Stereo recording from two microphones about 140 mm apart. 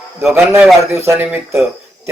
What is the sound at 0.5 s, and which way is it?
Speech, 20° right (ahead or behind).